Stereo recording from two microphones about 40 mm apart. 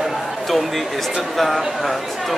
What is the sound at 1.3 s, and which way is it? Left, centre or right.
Speech, centre.